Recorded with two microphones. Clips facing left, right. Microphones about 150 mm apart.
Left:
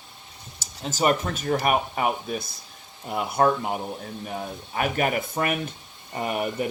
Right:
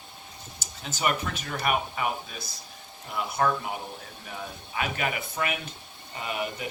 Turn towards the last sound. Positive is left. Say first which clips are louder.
# left 6 dB
turn(degrees=45)  # may be behind; listen again after turning